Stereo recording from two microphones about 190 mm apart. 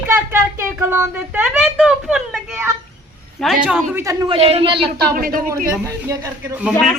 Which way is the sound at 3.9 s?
15° right (ahead or behind).